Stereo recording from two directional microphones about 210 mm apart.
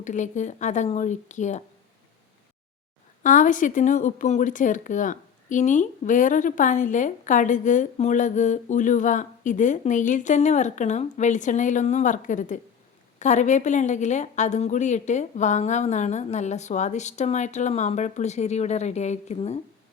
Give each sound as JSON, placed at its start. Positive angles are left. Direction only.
{"t": 0.0, "sound": "speech", "side_deg": 35}
{"t": 3.2, "sound": "speech", "side_deg": 40}